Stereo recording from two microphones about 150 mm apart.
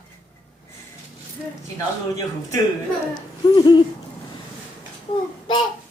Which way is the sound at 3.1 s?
30° left (ahead or behind).